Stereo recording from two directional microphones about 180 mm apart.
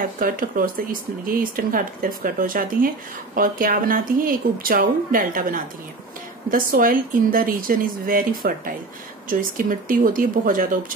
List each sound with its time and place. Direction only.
0.2 s a woman's voice: 50° right (ahead or behind)